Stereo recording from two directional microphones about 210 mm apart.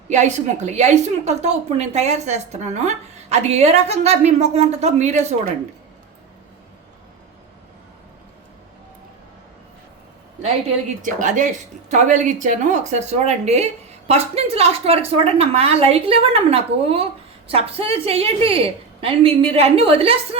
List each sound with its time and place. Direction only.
0.1 s a woman's voice: 35° right (ahead or behind)
11.0 s a woman's voice: 40° right (ahead or behind)